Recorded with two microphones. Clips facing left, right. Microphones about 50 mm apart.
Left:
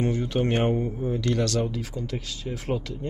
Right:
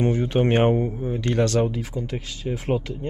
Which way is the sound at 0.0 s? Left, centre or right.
Right.